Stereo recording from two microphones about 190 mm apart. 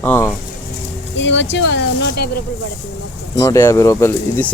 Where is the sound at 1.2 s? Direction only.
75° left (ahead or behind).